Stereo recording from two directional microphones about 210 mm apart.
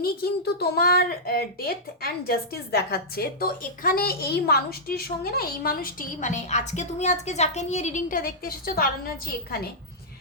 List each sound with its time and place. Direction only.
0.0 s speech: 50° left (ahead or behind)